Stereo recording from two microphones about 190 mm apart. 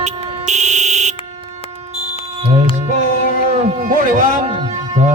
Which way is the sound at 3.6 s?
40° right (ahead or behind).